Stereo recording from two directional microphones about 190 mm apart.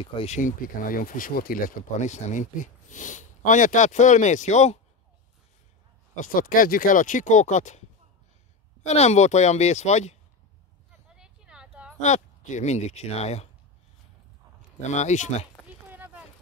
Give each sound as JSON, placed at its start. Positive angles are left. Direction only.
{"t": 0.0, "sound": "speech", "side_deg": 30}
{"t": 6.1, "sound": "speech", "side_deg": 45}
{"t": 8.8, "sound": "speech", "side_deg": 35}
{"t": 11.1, "sound": "a sound", "side_deg": -5}
{"t": 12.0, "sound": "speech", "side_deg": 40}
{"t": 14.8, "sound": "speech", "side_deg": 40}
{"t": 15.9, "sound": "a sound", "side_deg": -10}